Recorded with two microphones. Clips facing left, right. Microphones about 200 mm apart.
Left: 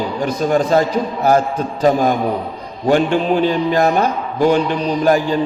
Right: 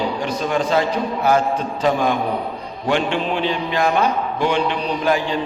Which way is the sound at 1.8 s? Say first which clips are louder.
Left 5 dB; 40° left (ahead or behind).